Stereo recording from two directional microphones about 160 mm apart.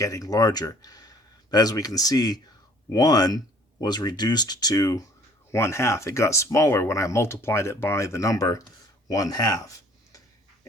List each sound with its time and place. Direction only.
0.0 s speech: 20° left (ahead or behind)